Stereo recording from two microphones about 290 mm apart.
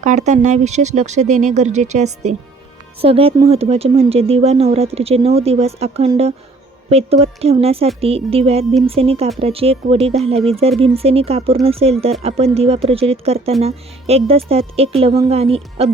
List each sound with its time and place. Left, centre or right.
0.0 s speech: right